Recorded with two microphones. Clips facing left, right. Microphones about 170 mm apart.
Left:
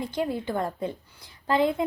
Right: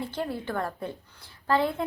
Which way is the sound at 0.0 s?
15° left (ahead or behind).